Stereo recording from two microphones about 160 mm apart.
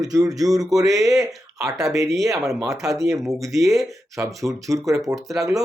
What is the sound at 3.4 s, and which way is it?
Speech, 20° right (ahead or behind).